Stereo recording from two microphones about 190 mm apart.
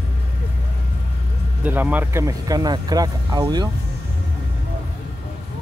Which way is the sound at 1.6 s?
10° right (ahead or behind).